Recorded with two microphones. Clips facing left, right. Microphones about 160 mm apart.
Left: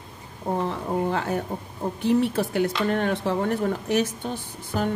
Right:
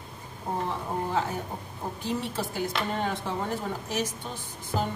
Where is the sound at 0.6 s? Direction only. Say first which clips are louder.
Left 5 dB; 65° left (ahead or behind).